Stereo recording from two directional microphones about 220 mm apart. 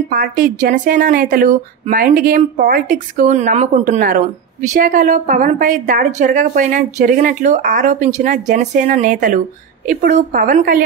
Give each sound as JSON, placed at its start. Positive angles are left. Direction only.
{"t": 0.1, "sound": "a woman's voice", "side_deg": -40}